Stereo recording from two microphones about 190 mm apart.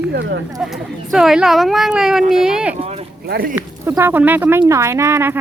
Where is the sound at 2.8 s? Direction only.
30° right (ahead or behind).